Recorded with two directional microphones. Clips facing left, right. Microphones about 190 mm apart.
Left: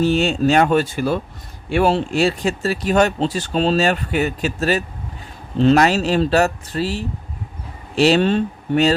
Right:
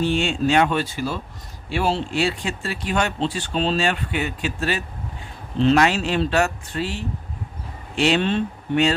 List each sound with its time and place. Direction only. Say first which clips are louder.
0.0 s speech: left 4 dB; 40° left (ahead or behind)